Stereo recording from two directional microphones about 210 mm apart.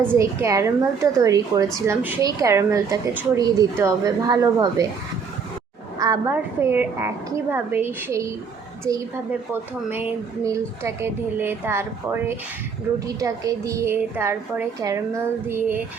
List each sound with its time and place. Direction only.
0.1 s a woman's voice: 15° right (ahead or behind)
6.0 s a woman's voice: 15° right (ahead or behind)
10.4 s a woman's voice: 15° right (ahead or behind)